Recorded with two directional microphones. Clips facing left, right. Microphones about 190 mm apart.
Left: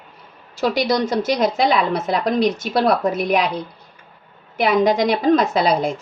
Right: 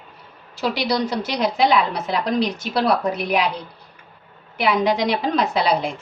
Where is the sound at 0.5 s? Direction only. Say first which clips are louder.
Left 3 dB; 45° left (ahead or behind).